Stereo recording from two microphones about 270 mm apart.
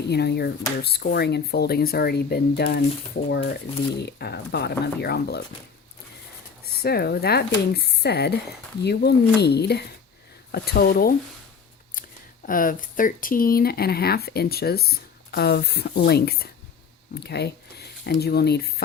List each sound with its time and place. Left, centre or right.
0.1 s speech: left
6.7 s speech: left
12.5 s speech: left